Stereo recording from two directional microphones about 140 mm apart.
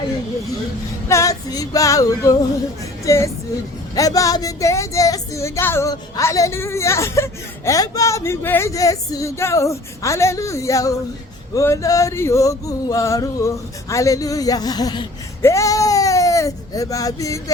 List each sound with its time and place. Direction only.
1.0 s music: 20° left (ahead or behind)
3.0 s speech: 20° left (ahead or behind)
3.9 s music: 25° left (ahead or behind)
15.4 s speech: 20° left (ahead or behind)